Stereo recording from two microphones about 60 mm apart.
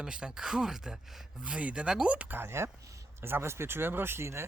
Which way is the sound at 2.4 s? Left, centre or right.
Right.